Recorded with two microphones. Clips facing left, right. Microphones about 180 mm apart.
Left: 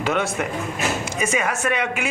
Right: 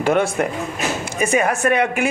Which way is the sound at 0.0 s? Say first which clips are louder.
Right 5 dB; 50° right (ahead or behind).